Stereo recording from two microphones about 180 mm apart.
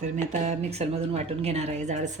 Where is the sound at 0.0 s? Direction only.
40° right (ahead or behind).